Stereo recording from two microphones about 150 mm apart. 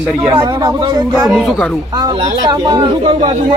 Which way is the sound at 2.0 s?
30° right (ahead or behind).